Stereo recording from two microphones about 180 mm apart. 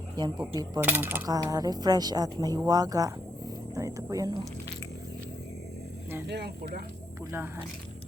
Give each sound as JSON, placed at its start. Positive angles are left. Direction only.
{"t": 0.2, "sound": "speech", "side_deg": -25}
{"t": 0.8, "sound": "speech", "side_deg": -10}
{"t": 6.2, "sound": "speech", "side_deg": -65}